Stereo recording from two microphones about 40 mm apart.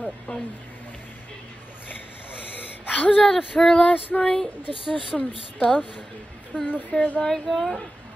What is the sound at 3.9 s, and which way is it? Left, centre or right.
Speech, left.